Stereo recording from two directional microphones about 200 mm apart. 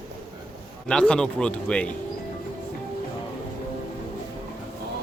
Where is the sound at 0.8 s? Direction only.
5° left (ahead or behind).